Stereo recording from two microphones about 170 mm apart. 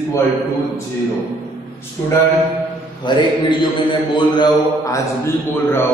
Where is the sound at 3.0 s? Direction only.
25° left (ahead or behind).